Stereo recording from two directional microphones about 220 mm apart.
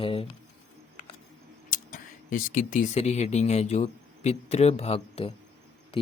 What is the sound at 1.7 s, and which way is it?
Speech, 40° left (ahead or behind).